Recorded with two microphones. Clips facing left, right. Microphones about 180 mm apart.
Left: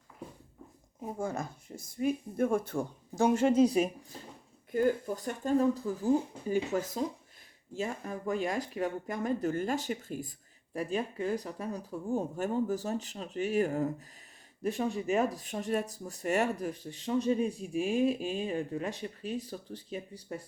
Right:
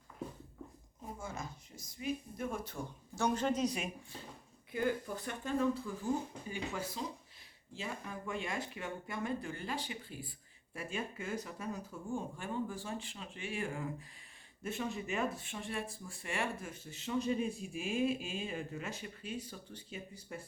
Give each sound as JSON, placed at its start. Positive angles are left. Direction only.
{"t": 1.2, "sound": "speech", "side_deg": 55}
{"t": 3.4, "sound": "speech", "side_deg": 30}
{"t": 4.7, "sound": "speech", "side_deg": 45}